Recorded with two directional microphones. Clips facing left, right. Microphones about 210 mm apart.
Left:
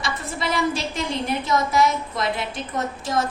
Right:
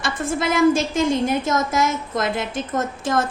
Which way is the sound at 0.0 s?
50° right (ahead or behind).